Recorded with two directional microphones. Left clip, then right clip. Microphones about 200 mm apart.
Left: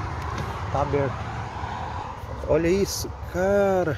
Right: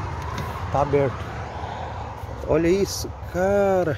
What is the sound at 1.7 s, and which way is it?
Vehicle, 55° left (ahead or behind).